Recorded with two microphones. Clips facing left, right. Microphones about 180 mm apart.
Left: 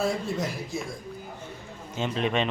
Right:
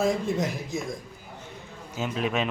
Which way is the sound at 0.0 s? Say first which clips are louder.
Right 3 dB; 20° right (ahead or behind).